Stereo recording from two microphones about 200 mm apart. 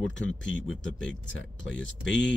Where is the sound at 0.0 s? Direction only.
65° left (ahead or behind).